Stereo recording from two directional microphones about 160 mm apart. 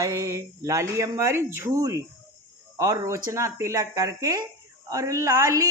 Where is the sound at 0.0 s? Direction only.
20° right (ahead or behind).